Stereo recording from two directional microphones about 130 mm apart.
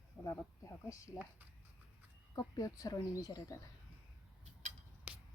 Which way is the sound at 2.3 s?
30° left (ahead or behind).